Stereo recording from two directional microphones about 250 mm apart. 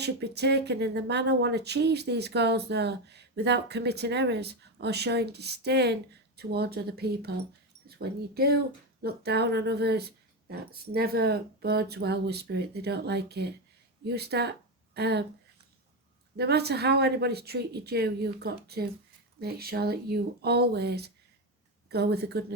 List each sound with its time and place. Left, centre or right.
0.0 s speech: right
16.4 s speech: right